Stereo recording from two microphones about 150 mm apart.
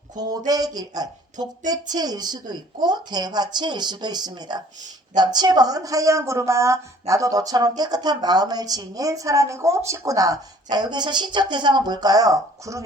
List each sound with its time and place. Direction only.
0.2 s speech: 25° right (ahead or behind)